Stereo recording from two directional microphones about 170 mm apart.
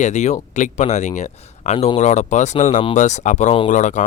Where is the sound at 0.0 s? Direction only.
45° left (ahead or behind).